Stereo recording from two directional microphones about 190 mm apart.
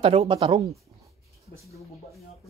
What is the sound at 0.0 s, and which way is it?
Speech, 30° right (ahead or behind).